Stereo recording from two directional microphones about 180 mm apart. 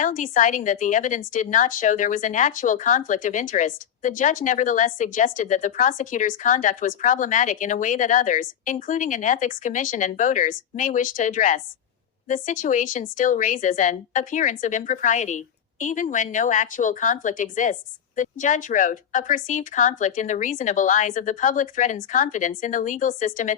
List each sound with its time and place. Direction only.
0.0 s a woman's voice: 45° left (ahead or behind)